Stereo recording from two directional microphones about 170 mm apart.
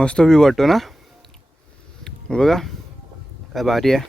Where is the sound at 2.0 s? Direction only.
5° left (ahead or behind).